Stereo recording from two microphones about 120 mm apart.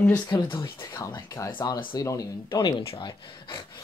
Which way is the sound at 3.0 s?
40° left (ahead or behind).